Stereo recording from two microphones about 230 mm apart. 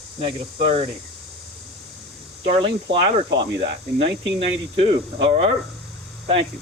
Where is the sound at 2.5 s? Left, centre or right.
Right.